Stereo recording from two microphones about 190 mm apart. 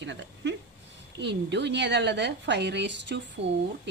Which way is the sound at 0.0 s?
70° right (ahead or behind).